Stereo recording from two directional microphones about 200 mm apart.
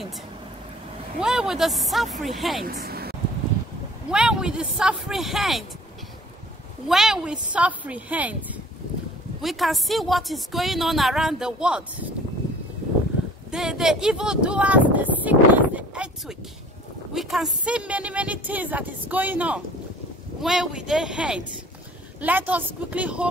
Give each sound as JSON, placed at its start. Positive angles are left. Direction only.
{"t": 1.2, "sound": "a woman's voice", "side_deg": -5}
{"t": 2.6, "sound": "a sound", "side_deg": -50}
{"t": 4.1, "sound": "a woman's voice", "side_deg": -5}
{"t": 6.9, "sound": "a woman's voice", "side_deg": 0}
{"t": 13.5, "sound": "a woman's voice", "side_deg": -5}